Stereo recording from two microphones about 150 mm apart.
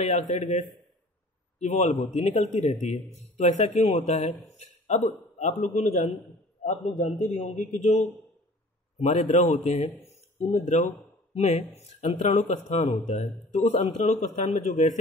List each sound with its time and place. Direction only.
0.0 s speech: 50° left (ahead or behind)
7.2 s speech: 55° left (ahead or behind)
10.0 s a sound: 50° left (ahead or behind)
11.3 s speech: 50° left (ahead or behind)
13.9 s speech: 55° left (ahead or behind)